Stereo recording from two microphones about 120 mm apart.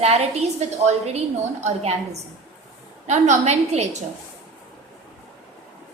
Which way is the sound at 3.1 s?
80° right.